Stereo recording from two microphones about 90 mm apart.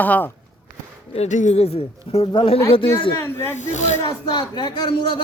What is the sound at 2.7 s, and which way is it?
Speech, 80° left.